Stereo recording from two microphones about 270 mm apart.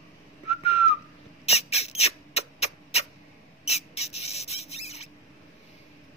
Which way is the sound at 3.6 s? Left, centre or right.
Left.